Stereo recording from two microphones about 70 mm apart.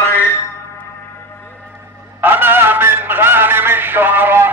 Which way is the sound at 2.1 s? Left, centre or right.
Right.